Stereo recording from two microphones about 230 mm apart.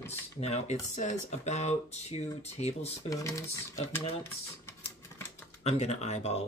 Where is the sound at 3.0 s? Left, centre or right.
Centre.